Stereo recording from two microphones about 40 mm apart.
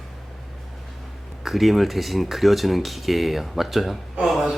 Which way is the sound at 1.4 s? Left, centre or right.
Centre.